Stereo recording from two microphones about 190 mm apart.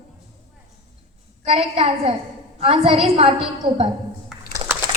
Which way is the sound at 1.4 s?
30° right (ahead or behind).